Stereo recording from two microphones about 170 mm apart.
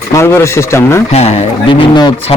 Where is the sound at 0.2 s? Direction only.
15° left (ahead or behind).